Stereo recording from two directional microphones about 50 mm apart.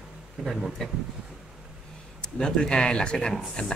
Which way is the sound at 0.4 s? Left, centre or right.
Centre.